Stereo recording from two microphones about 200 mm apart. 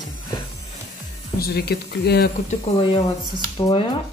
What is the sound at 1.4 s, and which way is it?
Speech, 50° left (ahead or behind).